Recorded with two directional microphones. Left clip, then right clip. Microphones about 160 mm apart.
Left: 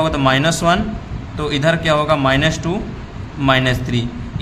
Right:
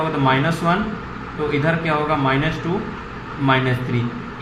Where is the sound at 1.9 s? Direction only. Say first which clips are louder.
Left 5 dB; 90° left.